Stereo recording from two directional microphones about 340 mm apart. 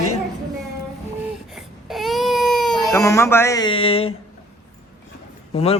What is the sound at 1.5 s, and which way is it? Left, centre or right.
Baby cry, centre.